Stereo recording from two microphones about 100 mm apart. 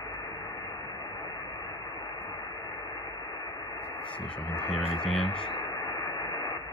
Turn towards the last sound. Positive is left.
turn(degrees=50)  # may be behind; listen again after turning